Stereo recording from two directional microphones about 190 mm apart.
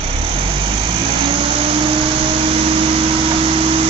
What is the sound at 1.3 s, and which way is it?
Vacuum cleaner, 25° right (ahead or behind).